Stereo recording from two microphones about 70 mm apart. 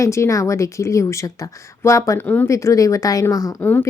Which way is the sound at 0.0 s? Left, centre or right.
Left.